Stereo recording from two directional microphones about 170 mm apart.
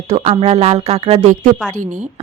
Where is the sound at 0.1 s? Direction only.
40° right (ahead or behind).